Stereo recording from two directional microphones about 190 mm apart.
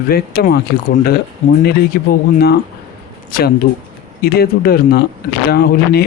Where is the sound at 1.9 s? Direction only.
55° left (ahead or behind).